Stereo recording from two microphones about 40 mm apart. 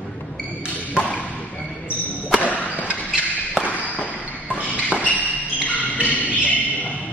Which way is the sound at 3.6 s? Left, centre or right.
Left.